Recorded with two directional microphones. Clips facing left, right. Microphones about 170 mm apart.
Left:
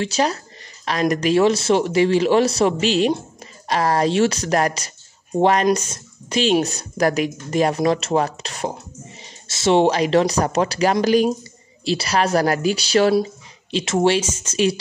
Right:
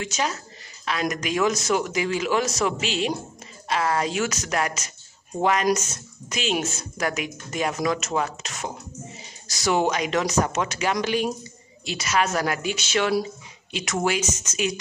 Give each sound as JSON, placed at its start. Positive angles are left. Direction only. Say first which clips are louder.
{"t": 0.0, "sound": "speech", "louder": "left 7 dB", "side_deg": 35}